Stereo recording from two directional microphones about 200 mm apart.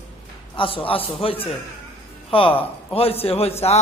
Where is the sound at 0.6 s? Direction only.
25° left (ahead or behind).